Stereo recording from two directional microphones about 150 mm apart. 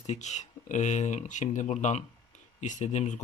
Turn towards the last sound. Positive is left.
turn(degrees=50)  # may be behind; listen again after turning